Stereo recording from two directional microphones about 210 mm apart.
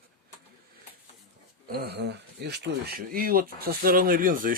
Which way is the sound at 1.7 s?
50° right (ahead or behind).